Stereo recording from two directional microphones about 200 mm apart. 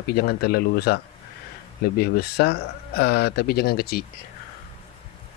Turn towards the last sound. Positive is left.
turn(degrees=50)  # may be behind; listen again after turning